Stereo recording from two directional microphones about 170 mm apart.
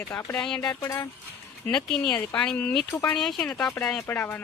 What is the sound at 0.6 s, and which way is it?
Speech, 20° left (ahead or behind).